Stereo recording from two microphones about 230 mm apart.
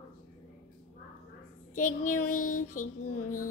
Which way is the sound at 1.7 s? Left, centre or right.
Left.